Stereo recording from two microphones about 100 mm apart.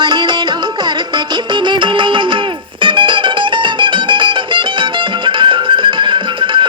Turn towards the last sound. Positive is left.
turn(degrees=-55)  # may be behind; listen again after turning